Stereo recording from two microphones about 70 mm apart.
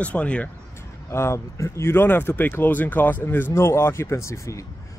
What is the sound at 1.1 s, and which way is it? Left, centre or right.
Speech, left.